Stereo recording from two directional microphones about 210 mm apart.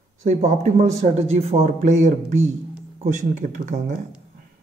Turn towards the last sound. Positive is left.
turn(degrees=-35)  # may be behind; listen again after turning